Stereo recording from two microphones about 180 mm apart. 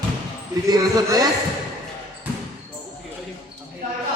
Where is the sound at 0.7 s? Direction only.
20° right (ahead or behind).